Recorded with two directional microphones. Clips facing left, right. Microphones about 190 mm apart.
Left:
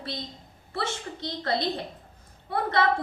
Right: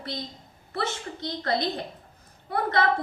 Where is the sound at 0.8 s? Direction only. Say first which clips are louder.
Right 1 dB; 25° left (ahead or behind).